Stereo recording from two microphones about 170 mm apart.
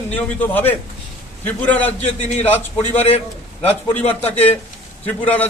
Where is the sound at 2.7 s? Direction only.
35° left (ahead or behind).